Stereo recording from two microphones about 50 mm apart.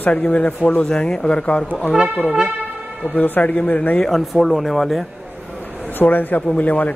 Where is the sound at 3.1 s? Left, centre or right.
Left.